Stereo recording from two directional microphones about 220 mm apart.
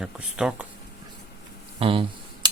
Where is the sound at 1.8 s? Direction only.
25° right (ahead or behind).